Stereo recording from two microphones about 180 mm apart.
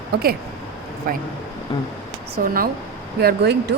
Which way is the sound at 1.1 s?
50° right (ahead or behind).